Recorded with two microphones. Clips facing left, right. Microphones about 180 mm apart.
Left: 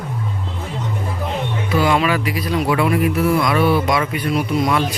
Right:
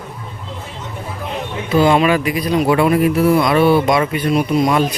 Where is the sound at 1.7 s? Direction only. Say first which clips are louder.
Right 5 dB; 25° right (ahead or behind).